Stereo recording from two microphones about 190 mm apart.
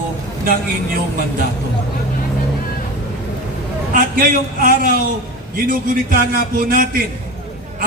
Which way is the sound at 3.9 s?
50° right (ahead or behind).